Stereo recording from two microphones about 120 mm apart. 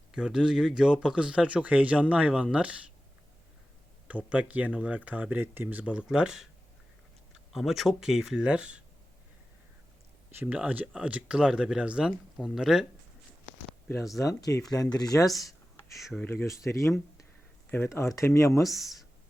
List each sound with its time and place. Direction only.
0.1 s speech: 5° right (ahead or behind)
4.3 s speech: 10° right (ahead or behind)
10.3 s speech: 10° right (ahead or behind)
14.3 s speech: 30° left (ahead or behind)
16.2 s speech: 20° left (ahead or behind)
18.7 s speech: centre (ahead or behind)